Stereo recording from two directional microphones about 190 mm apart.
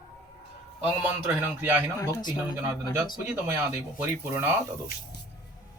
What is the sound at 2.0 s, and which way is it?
Speech, 20° left (ahead or behind).